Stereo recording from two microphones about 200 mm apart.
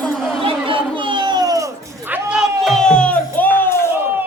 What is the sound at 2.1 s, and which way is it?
Music, 5° right (ahead or behind).